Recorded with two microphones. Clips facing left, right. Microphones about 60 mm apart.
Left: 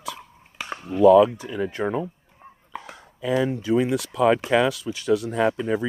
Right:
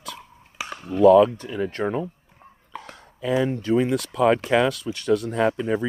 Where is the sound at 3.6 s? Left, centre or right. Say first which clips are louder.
Even; centre.